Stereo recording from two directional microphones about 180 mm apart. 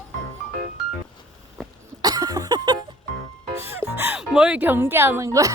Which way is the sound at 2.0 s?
20° right (ahead or behind).